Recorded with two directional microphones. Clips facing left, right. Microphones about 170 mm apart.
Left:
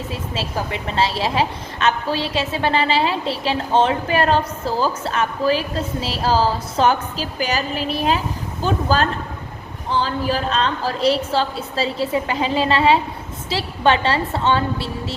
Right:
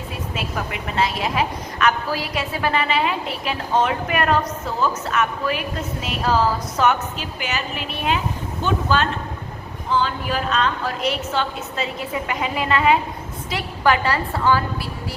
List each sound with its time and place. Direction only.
0.1 s a woman's voice: 30° left (ahead or behind)